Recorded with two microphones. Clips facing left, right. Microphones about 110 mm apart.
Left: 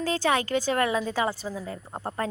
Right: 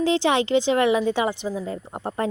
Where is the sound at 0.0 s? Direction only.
20° right (ahead or behind).